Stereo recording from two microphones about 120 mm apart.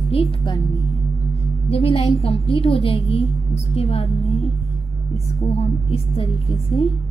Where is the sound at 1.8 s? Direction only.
55° left (ahead or behind).